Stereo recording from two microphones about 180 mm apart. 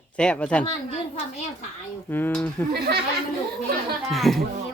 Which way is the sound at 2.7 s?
60° right (ahead or behind).